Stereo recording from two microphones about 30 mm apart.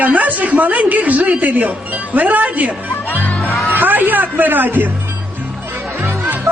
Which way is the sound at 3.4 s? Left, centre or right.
Right.